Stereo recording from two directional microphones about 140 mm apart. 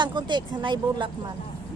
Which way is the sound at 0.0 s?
35° right (ahead or behind).